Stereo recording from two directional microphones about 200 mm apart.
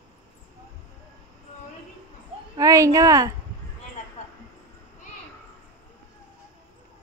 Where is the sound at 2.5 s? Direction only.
15° right (ahead or behind).